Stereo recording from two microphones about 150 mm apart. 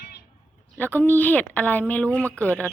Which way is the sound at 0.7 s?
10° left (ahead or behind).